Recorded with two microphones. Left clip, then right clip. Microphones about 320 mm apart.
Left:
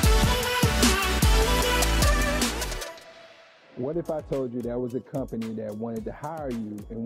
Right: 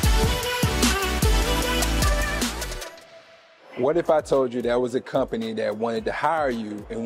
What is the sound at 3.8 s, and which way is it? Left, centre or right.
A man's voice, centre.